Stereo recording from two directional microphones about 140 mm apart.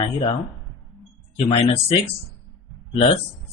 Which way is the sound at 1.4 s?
45° left (ahead or behind).